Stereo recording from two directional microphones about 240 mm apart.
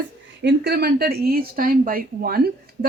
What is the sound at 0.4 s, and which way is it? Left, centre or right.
Speech, right.